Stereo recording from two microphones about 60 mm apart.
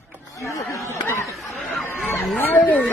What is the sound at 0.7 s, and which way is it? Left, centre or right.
Speech, left.